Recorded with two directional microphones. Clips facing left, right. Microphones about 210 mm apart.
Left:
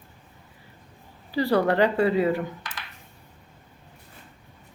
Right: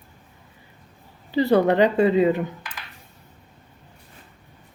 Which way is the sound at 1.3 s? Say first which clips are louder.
Right 4 dB; 20° right (ahead or behind).